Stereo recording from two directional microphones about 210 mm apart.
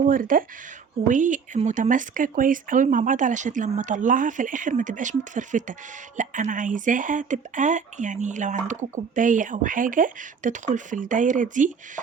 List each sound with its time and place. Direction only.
0.1 s speech: 40° right (ahead or behind)